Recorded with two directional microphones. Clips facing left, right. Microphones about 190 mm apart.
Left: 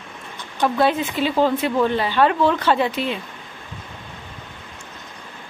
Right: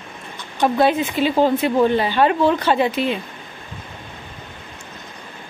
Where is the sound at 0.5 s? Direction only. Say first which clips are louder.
Right 2 dB; 20° right (ahead or behind).